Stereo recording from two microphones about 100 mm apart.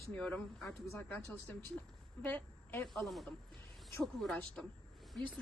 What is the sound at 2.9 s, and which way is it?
A woman's voice, centre (ahead or behind).